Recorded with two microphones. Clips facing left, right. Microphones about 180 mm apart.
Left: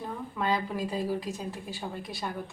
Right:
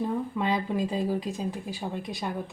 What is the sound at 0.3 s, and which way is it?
Speech, 20° right (ahead or behind).